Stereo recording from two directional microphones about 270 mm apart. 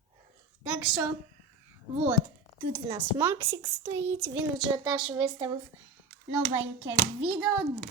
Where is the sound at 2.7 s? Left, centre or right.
Centre.